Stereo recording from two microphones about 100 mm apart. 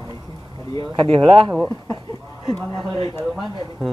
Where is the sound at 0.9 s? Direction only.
60° right (ahead or behind).